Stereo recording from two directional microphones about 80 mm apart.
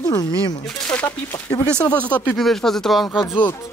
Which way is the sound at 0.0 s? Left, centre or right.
Left.